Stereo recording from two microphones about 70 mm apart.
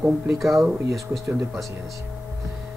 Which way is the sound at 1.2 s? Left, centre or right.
Right.